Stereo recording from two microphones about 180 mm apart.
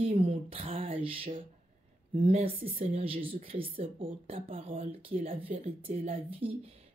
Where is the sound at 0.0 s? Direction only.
30° right (ahead or behind).